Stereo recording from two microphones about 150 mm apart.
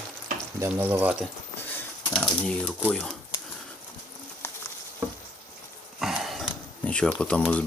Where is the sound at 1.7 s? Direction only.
10° left (ahead or behind).